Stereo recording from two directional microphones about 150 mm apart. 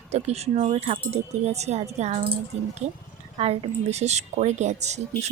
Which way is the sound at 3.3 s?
45° right (ahead or behind).